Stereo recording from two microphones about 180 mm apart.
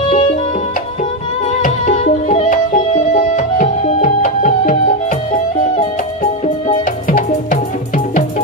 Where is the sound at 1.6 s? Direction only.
40° left (ahead or behind).